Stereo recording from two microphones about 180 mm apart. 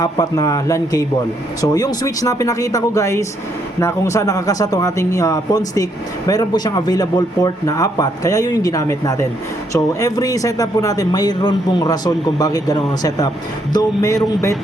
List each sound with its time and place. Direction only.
0.0 s a man's voice: 20° left (ahead or behind)